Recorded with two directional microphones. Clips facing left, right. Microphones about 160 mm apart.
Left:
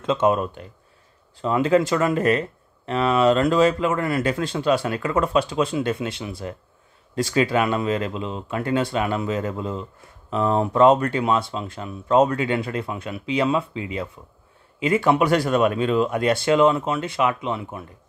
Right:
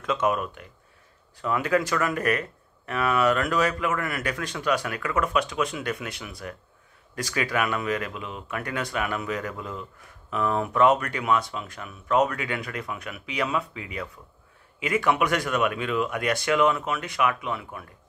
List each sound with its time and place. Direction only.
0.0 s speech: 25° left (ahead or behind)